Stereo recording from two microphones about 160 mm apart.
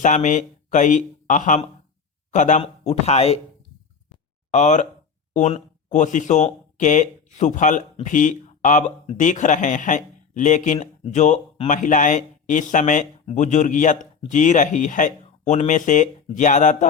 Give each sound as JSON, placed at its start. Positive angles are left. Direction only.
{"t": 0.0, "sound": "speech", "side_deg": 50}
{"t": 4.5, "sound": "speech", "side_deg": 50}